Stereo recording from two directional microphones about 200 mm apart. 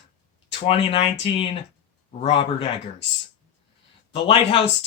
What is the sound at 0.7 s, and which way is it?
Speech, 25° left (ahead or behind).